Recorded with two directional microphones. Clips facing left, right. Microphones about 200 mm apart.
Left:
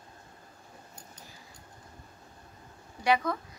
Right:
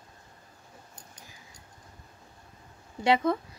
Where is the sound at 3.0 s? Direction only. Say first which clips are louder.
Right 3 dB; 25° right (ahead or behind).